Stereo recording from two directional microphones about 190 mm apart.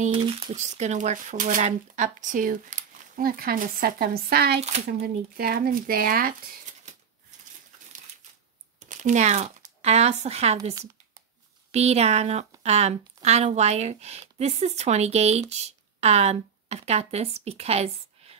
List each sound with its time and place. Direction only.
0.0 s speech: 30° right (ahead or behind); by 6.3 s 50° right (ahead or behind)
8.7 s speech: 40° right (ahead or behind)
11.7 s speech: 35° right (ahead or behind)